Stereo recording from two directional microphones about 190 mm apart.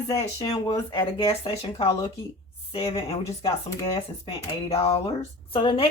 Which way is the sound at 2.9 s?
30° left (ahead or behind).